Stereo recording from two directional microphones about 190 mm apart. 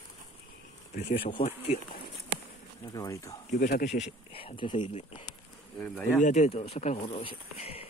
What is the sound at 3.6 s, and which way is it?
Speech, 45° left (ahead or behind).